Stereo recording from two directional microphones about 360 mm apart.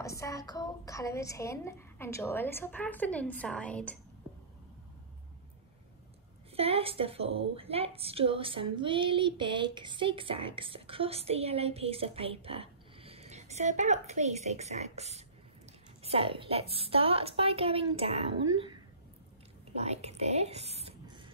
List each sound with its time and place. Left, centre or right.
0.0 s a woman's voice: centre
6.5 s a woman's voice: centre